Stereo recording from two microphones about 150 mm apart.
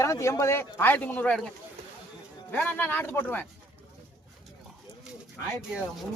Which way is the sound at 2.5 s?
10° left (ahead or behind).